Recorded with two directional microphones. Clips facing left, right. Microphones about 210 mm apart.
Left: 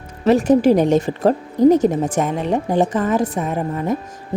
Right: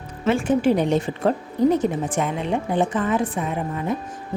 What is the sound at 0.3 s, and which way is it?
A woman's voice, 40° left (ahead or behind).